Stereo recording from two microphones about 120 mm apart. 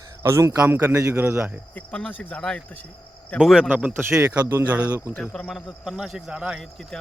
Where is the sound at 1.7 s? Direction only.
10° left (ahead or behind).